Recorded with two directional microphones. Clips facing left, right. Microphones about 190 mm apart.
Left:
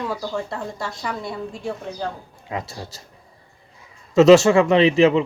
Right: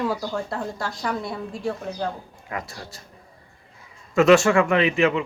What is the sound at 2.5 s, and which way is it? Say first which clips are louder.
Speech: left 3 dB; 20° left (ahead or behind).